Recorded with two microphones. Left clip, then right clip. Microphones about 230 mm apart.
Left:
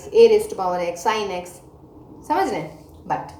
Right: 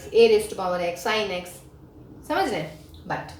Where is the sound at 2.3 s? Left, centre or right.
Right.